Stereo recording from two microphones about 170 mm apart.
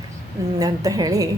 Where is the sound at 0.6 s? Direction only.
20° right (ahead or behind).